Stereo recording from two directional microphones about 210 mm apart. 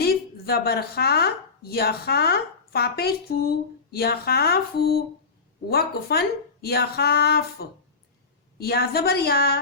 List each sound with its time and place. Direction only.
0.0 s speech: 50° left (ahead or behind)